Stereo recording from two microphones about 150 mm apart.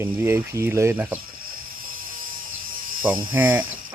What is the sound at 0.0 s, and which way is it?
Speech, 20° right (ahead or behind).